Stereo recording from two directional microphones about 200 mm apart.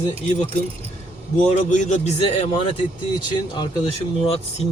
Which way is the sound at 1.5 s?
40° left (ahead or behind).